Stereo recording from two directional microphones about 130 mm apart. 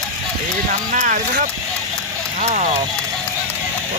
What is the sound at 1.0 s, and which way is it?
Speech, 80° right.